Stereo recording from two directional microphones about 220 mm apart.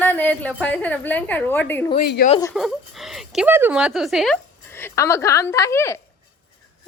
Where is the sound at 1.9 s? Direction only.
40° left (ahead or behind).